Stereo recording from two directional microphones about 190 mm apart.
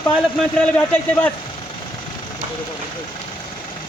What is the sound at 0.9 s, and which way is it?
Speech, 5° left (ahead or behind).